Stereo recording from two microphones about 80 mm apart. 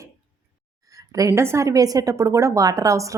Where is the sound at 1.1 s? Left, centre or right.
Right.